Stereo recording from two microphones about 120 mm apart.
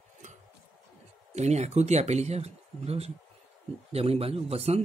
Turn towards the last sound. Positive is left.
turn(degrees=-60)  # may be behind; listen again after turning